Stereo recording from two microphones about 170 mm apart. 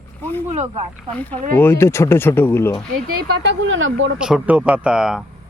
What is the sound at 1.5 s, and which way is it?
Speech, 15° left (ahead or behind).